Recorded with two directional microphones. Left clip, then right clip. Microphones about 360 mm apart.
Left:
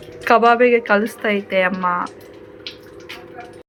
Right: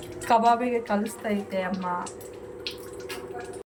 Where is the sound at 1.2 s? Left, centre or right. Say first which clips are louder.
Left 10 dB; left.